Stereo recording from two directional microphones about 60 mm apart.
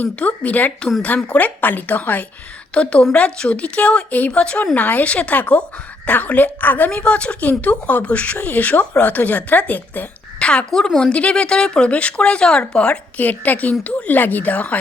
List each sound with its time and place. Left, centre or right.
0.0 s a woman's voice: left
10.4 s a woman's voice: centre